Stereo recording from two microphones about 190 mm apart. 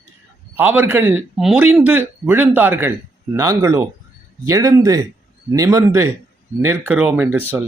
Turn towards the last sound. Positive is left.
turn(degrees=-10)  # may be behind; listen again after turning